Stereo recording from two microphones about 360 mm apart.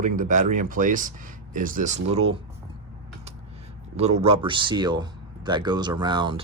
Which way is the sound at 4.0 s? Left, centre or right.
Centre.